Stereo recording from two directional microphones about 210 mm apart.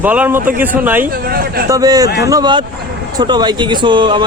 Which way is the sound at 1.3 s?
45° right (ahead or behind).